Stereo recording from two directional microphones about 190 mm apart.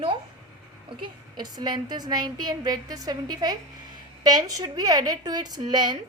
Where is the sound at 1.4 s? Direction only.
20° right (ahead or behind).